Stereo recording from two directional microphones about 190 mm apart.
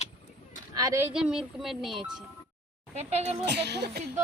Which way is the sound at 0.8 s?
15° right (ahead or behind).